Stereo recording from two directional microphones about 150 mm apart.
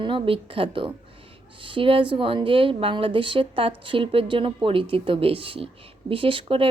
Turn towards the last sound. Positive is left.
turn(degrees=-35)  # may be behind; listen again after turning